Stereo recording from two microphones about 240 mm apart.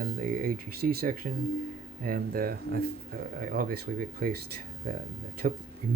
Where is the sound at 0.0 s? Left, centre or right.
Right.